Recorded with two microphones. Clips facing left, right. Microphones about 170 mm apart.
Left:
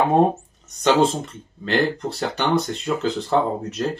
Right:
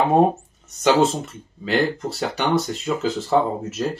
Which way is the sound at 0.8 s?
5° right (ahead or behind).